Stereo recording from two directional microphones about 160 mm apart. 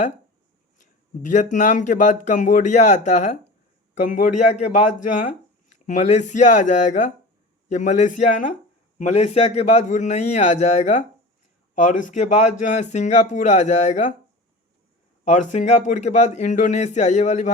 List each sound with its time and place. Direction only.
1.2 s speech: 50° left (ahead or behind)
15.2 s speech: 50° left (ahead or behind)